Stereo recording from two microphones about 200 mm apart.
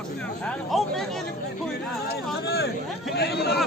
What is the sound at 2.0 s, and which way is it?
Speech, 55° left (ahead or behind).